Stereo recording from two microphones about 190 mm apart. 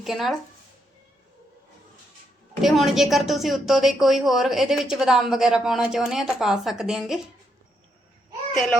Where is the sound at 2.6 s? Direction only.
Centre (ahead or behind).